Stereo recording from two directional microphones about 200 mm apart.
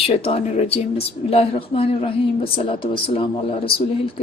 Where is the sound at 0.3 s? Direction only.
30° left (ahead or behind).